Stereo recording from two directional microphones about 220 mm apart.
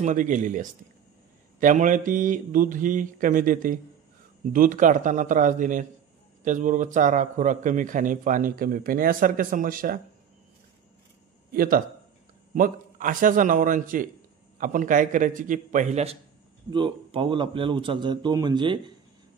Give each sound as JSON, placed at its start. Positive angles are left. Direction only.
{"t": 0.0, "sound": "a man's voice", "side_deg": -35}
{"t": 11.5, "sound": "a man's voice", "side_deg": -40}